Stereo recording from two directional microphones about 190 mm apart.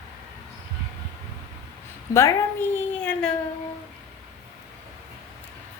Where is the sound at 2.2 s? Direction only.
15° left (ahead or behind).